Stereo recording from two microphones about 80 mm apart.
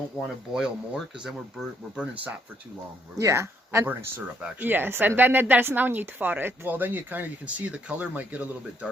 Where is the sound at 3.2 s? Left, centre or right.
Right.